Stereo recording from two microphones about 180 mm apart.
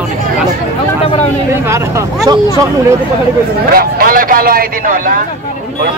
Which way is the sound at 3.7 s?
55° right (ahead or behind).